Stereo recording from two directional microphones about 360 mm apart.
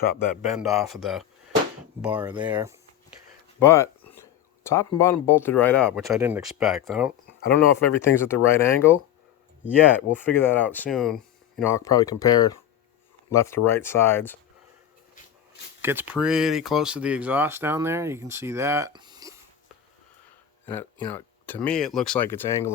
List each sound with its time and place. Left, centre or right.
0.0 s speech: left
0.6 s speech: centre
3.6 s speech: centre
15.8 s speech: centre
20.7 s speech: centre